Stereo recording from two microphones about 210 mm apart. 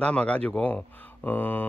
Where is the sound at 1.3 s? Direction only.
10° left (ahead or behind).